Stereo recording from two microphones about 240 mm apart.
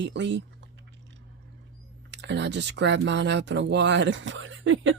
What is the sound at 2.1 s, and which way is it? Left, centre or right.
Speech, right.